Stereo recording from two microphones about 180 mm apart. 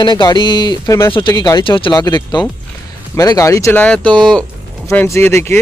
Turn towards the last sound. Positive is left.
turn(degrees=15)  # may be behind; listen again after turning